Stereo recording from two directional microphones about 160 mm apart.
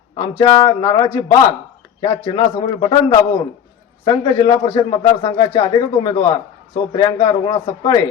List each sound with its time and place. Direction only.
0.2 s a man's voice: 25° left (ahead or behind)